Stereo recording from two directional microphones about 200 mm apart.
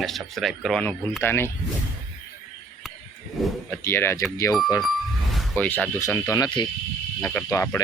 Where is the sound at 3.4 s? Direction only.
10° left (ahead or behind).